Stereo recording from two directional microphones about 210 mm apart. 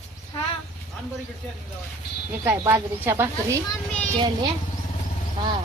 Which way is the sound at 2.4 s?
10° right (ahead or behind).